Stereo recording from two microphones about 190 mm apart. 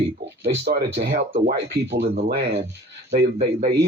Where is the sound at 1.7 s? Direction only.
55° right (ahead or behind).